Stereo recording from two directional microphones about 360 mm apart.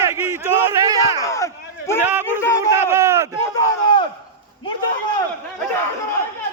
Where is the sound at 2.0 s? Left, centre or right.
Centre.